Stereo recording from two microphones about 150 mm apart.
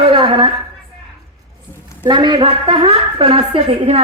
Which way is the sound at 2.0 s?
30° right (ahead or behind).